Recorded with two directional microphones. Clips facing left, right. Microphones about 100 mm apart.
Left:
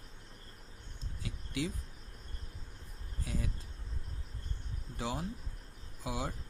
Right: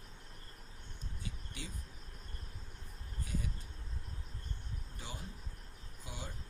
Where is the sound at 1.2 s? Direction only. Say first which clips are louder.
Left 12 dB; 90° left.